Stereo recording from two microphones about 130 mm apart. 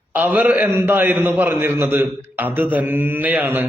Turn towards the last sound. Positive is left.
turn(degrees=-15)  # may be behind; listen again after turning